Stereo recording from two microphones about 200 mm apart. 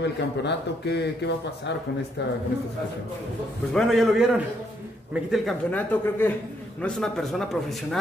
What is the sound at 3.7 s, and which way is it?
A man's voice, centre (ahead or behind).